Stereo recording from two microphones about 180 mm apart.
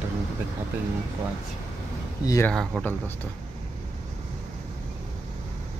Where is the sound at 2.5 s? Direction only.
Centre (ahead or behind).